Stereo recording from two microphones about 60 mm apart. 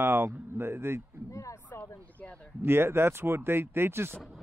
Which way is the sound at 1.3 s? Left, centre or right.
Left.